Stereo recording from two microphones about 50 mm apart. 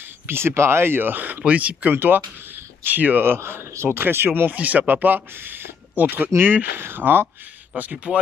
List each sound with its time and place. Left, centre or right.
0.3 s speech: right
1.4 s speech: right
2.0 s speech: right
3.3 s speech: right
4.5 s speech: right